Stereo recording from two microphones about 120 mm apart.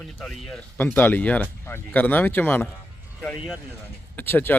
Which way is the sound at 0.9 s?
15° left (ahead or behind).